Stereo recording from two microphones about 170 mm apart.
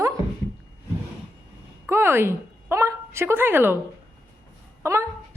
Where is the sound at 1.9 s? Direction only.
15° right (ahead or behind).